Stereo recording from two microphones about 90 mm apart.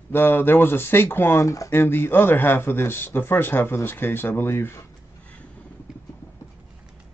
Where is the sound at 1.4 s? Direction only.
40° left (ahead or behind).